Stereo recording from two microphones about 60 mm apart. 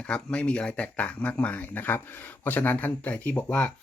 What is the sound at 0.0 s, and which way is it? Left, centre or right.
Speech, centre.